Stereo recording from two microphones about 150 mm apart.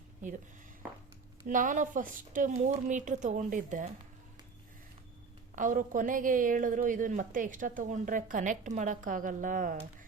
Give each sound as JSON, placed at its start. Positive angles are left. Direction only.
{"t": 1.5, "sound": "a woman's voice", "side_deg": -60}
{"t": 5.5, "sound": "a woman's voice", "side_deg": -60}